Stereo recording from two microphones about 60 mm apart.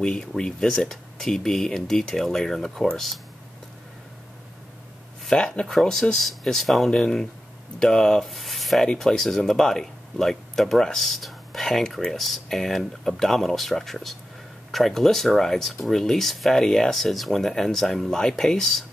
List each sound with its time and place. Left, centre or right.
0.0 s speech: centre
5.2 s speech: centre